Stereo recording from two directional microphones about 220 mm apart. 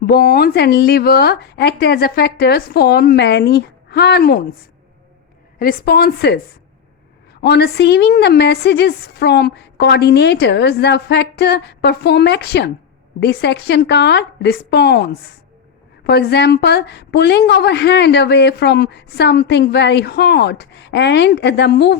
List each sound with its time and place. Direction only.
0.0 s a woman's voice: 45° left (ahead or behind)
5.5 s a woman's voice: 40° left (ahead or behind)
7.4 s a woman's voice: 45° left (ahead or behind)